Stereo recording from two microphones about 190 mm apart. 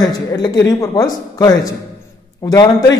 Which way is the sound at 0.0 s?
20° left (ahead or behind).